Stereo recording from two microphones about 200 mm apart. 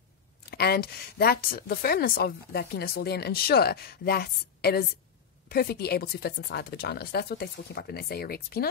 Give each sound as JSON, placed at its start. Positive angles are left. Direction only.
{"t": 0.5, "sound": "speech", "side_deg": 50}